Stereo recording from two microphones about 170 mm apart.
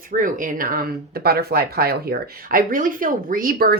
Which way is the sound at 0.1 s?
50° right (ahead or behind).